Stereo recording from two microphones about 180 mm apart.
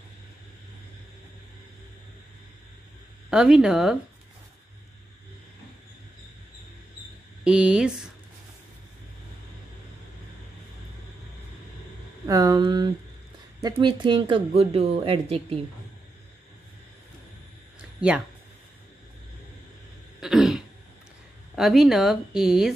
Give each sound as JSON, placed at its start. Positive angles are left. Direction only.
{"t": 3.3, "sound": "speech", "side_deg": -5}
{"t": 7.4, "sound": "speech", "side_deg": -5}
{"t": 12.3, "sound": "speech", "side_deg": -20}
{"t": 20.2, "sound": "throat clearing", "side_deg": -5}
{"t": 21.5, "sound": "speech", "side_deg": 0}